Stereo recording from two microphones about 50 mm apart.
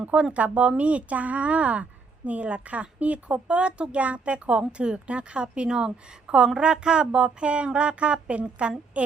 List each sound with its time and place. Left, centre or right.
0.0 s a woman's voice: right